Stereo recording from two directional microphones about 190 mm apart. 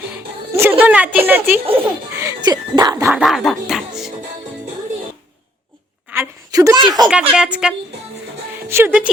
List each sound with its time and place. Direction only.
0.5 s a woman's voice: 10° right (ahead or behind)
3.1 s speech: centre (ahead or behind)
6.1 s a sound: 15° right (ahead or behind)
7.1 s a woman's voice: 5° right (ahead or behind)
8.7 s a woman's voice: 10° right (ahead or behind)